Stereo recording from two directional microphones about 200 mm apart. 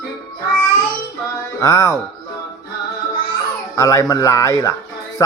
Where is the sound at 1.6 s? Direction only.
15° left (ahead or behind).